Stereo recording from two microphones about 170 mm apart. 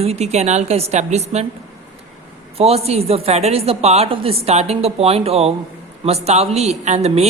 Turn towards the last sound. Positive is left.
turn(degrees=-40)  # may be behind; listen again after turning